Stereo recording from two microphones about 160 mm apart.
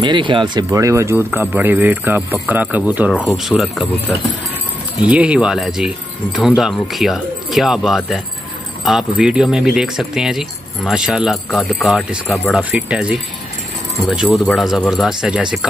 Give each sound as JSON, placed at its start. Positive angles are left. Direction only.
{"t": 0.0, "sound": "speech", "side_deg": -30}
{"t": 0.7, "sound": "a man's voice", "side_deg": -20}
{"t": 5.0, "sound": "speech", "side_deg": -5}